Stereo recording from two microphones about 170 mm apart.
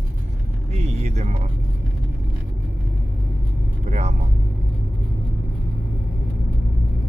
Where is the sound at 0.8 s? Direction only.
40° right (ahead or behind).